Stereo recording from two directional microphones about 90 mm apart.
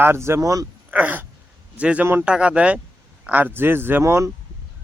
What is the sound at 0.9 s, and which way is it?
Speech, 15° right (ahead or behind).